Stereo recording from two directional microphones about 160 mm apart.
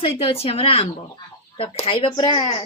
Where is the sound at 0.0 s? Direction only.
35° left (ahead or behind).